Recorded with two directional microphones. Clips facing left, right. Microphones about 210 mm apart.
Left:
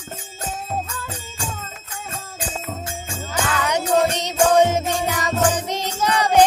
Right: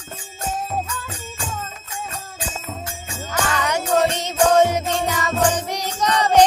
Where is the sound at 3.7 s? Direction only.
15° left (ahead or behind).